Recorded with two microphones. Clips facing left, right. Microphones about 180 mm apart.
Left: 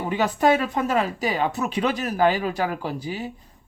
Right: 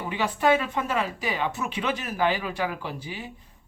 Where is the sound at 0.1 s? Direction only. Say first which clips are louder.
Left 3 dB; 40° left (ahead or behind).